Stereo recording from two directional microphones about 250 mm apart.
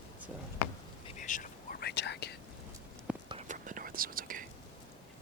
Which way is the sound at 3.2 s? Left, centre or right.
Right.